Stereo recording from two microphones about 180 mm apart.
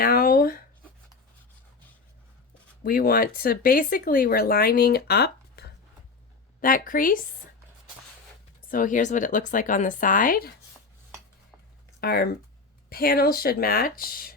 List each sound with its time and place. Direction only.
0.0 s a sound: 55° left (ahead or behind)
2.8 s speech: 55° left (ahead or behind)
6.6 s speech: 50° left (ahead or behind)
8.7 s speech: 45° left (ahead or behind)
11.9 s speech: 60° left (ahead or behind)